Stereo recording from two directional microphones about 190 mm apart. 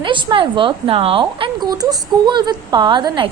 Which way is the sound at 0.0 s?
25° right (ahead or behind).